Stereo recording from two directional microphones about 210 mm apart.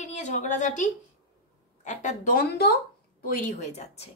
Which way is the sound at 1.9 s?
35° left (ahead or behind).